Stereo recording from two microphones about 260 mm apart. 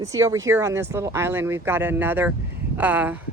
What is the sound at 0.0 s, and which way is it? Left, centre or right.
Speech, centre.